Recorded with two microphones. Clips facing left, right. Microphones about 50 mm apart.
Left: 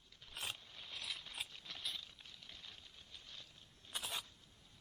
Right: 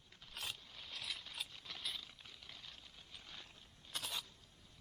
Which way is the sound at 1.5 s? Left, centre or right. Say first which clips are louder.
Even; centre.